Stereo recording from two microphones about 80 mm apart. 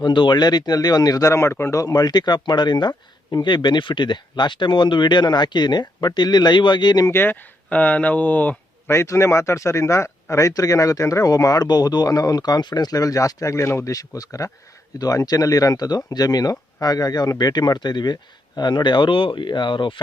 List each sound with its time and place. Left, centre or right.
0.0 s speech: left
1.8 s speech: left
7.1 s speech: left
8.9 s speech: left